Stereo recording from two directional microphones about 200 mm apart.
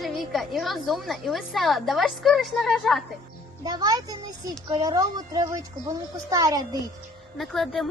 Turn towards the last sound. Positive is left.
turn(degrees=0)  # may be behind; listen again after turning